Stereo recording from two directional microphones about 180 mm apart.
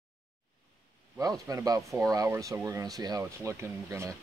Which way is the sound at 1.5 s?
20° right (ahead or behind).